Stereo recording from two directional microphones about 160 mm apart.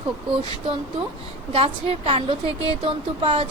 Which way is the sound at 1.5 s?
35° right (ahead or behind).